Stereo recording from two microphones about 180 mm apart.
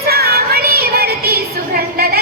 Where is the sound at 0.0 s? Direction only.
60° right (ahead or behind).